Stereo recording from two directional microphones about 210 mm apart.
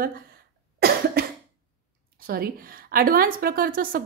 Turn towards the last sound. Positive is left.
turn(degrees=-45)  # may be behind; listen again after turning